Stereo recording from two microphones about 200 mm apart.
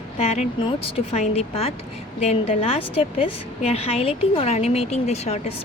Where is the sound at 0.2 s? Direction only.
30° left (ahead or behind).